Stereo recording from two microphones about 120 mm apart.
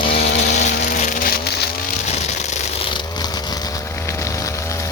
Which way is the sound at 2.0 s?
70° left (ahead or behind).